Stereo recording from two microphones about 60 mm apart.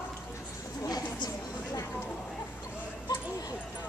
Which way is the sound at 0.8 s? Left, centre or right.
Left.